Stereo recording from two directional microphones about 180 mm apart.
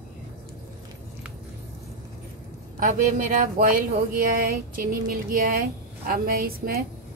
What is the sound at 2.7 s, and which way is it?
Speech, 50° right (ahead or behind).